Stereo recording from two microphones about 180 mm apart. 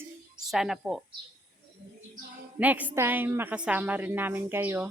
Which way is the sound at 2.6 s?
10° right (ahead or behind).